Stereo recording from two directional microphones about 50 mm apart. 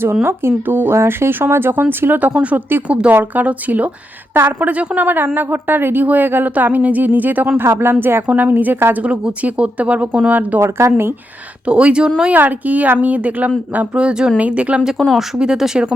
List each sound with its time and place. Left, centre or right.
0.0 s speech: right
2.3 s speech: right
3.1 s a woman's voice: right
5.0 s a woman's voice: right
7.6 s speech: right
8.3 s a woman's voice: right
9.0 s speech: right
10.6 s speech: right
11.6 s speech: right
12.3 s a woman's voice: right
13.9 s speech: centre
14.3 s speech: right
15.0 s speech: centre
15.4 s speech: centre